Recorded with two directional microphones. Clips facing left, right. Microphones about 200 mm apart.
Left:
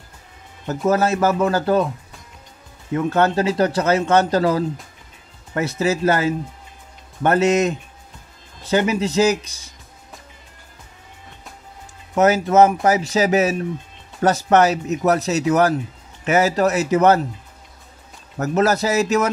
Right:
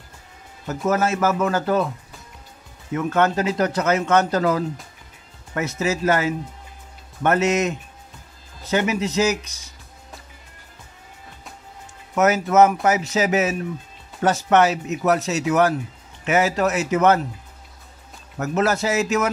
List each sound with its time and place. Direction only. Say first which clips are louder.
0.7 s speech: left 3 dB; 35° left (ahead or behind)
2.9 s speech: left 2 dB; 35° left (ahead or behind)
12.2 s speech: left 2 dB; 30° left (ahead or behind)
18.4 s speech: left 3 dB; 40° left (ahead or behind)